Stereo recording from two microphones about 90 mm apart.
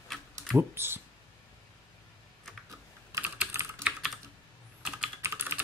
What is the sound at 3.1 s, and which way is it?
Computer keyboard, 40° right (ahead or behind).